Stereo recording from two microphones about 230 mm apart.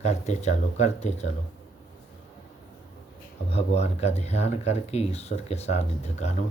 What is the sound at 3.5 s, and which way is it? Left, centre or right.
Speech, left.